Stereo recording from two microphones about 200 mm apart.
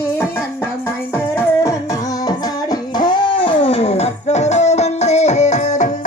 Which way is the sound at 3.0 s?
25° left (ahead or behind).